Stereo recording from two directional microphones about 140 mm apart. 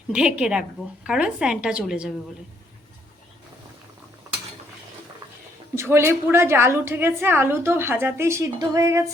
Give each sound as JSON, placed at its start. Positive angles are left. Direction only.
{"t": 0.1, "sound": "a woman's voice", "side_deg": -5}
{"t": 5.7, "sound": "a woman's voice", "side_deg": -20}
{"t": 8.5, "sound": "a sound", "side_deg": -25}